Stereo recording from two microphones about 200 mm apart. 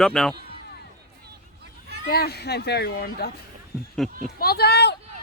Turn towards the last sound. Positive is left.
turn(degrees=55)  # may be behind; listen again after turning